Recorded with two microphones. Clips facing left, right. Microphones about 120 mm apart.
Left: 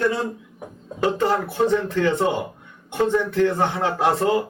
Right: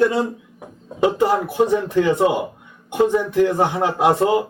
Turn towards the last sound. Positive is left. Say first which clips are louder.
# right 3 dB
turn(degrees=-15)  # may be behind; listen again after turning